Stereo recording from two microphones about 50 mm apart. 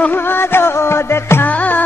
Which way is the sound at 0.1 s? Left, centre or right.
Left.